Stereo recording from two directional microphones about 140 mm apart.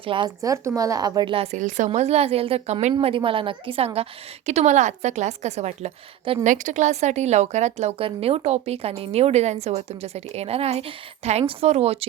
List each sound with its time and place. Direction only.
0.0 s a woman's voice: 40° right (ahead or behind)
0.4 s speech: 20° right (ahead or behind); by 1.5 s 40° right (ahead or behind)
1.5 s a woman's voice: 60° right (ahead or behind); by 4.0 s 45° right (ahead or behind)
4.4 s a woman's voice: 55° right (ahead or behind)
6.4 s a woman's voice: 60° right (ahead or behind)